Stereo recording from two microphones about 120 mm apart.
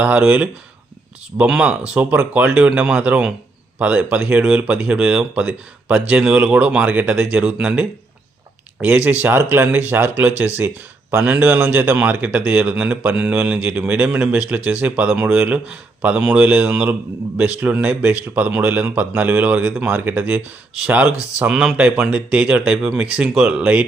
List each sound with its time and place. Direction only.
0.0 s a man's voice: 10° right (ahead or behind)